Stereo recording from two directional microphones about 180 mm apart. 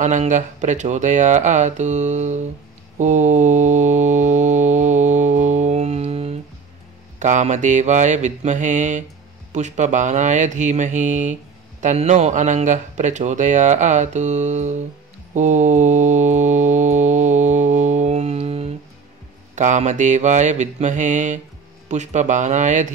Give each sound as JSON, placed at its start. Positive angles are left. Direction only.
{"t": 0.0, "sound": "speech", "side_deg": -40}
{"t": 3.0, "sound": "mantra", "side_deg": -40}
{"t": 11.8, "sound": "speech", "side_deg": -40}
{"t": 15.3, "sound": "mantra", "side_deg": -40}
{"t": 21.8, "sound": "speech", "side_deg": -40}